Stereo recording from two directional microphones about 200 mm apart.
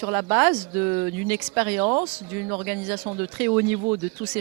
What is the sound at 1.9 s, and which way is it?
Speech, 30° right (ahead or behind).